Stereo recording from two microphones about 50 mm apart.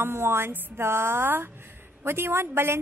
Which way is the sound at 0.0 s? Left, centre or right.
Right.